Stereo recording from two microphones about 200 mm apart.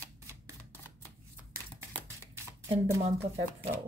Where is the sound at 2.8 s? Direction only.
15° right (ahead or behind).